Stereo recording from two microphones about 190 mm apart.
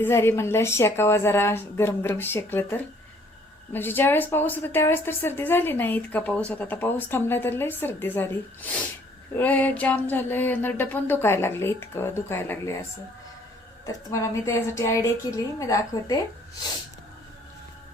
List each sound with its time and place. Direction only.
0.0 s a woman's voice: 10° left (ahead or behind)
9.3 s a woman's voice: 10° left (ahead or behind)
13.8 s a woman's voice: 15° left (ahead or behind)